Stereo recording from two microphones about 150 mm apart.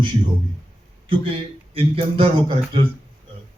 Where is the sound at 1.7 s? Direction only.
40° right (ahead or behind).